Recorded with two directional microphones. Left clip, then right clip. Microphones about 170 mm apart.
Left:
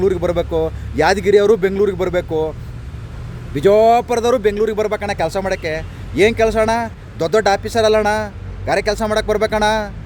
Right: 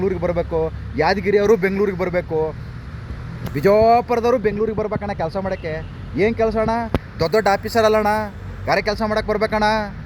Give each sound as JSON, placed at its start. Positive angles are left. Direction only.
{"t": 0.0, "sound": "speech", "side_deg": 20}
{"t": 3.5, "sound": "speech", "side_deg": 10}
{"t": 5.0, "sound": "speech", "side_deg": 40}
{"t": 5.6, "sound": "a man's voice", "side_deg": 20}